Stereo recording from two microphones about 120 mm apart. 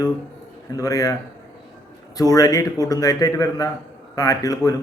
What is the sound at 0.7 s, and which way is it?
Speech, 30° left (ahead or behind).